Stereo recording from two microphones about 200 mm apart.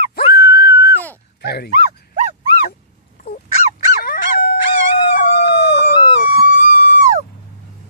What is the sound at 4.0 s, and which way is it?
Squeak, 50° left (ahead or behind).